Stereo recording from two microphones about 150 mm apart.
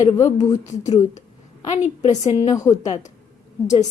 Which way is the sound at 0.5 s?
50° left (ahead or behind).